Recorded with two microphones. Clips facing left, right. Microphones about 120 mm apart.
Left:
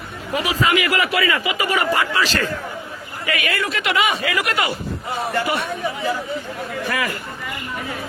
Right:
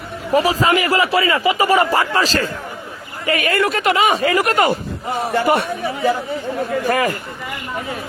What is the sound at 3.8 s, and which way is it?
A man's voice, 40° right (ahead or behind).